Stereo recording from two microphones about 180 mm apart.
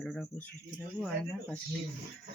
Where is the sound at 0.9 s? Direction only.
Centre (ahead or behind).